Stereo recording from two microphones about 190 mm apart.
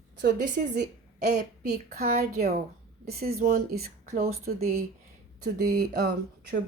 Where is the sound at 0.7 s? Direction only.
60° right (ahead or behind).